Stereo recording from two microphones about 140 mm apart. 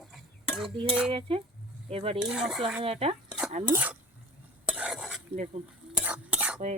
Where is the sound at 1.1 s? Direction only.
40° right (ahead or behind).